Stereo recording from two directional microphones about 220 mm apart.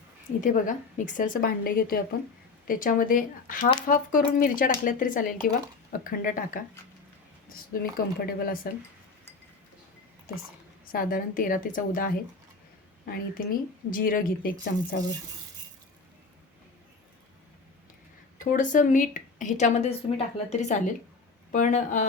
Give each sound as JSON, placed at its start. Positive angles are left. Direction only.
{"t": 0.4, "sound": "a woman's voice", "side_deg": 35}
{"t": 7.7, "sound": "a woman's voice", "side_deg": 40}
{"t": 10.9, "sound": "a woman's voice", "side_deg": 40}
{"t": 18.3, "sound": "a woman's voice", "side_deg": 35}